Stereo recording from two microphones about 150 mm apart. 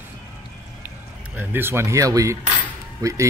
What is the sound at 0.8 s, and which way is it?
Speech, 15° right (ahead or behind).